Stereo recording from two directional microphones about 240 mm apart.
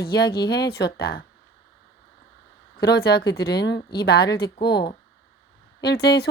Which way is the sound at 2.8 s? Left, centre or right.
Left.